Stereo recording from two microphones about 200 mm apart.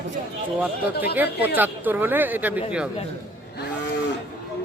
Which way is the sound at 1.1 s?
10° right (ahead or behind).